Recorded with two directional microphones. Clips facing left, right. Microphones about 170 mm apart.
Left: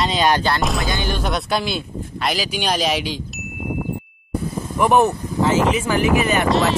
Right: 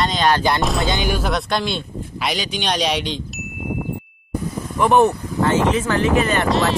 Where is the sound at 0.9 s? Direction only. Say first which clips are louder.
Right 2 dB; 15° right (ahead or behind).